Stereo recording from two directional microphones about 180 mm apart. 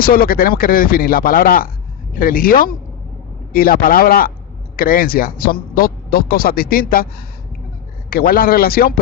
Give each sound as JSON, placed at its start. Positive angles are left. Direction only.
{"t": 0.0, "sound": "a man's voice", "side_deg": 55}
{"t": 8.1, "sound": "a man's voice", "side_deg": 55}